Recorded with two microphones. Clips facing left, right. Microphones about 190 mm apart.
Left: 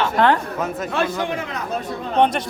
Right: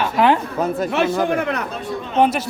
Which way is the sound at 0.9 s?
25° right (ahead or behind).